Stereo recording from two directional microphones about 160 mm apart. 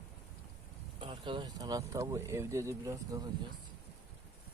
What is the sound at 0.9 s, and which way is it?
Speech, 35° right (ahead or behind).